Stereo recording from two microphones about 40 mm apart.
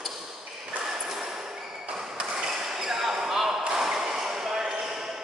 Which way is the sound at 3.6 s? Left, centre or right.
Centre.